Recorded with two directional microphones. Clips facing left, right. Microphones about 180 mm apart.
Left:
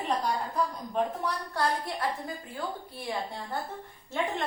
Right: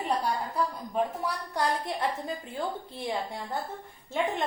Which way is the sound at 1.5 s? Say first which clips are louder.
Right 2 dB; 20° right (ahead or behind).